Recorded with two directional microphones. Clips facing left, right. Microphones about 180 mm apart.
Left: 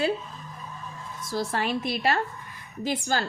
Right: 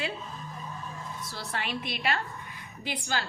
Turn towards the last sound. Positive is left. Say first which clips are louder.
# left 6 dB
turn(degrees=45)  # may be behind; listen again after turning